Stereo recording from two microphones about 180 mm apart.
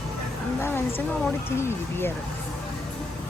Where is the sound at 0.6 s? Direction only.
10° left (ahead or behind).